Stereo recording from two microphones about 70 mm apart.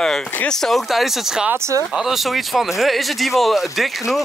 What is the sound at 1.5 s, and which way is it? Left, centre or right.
Speech, right.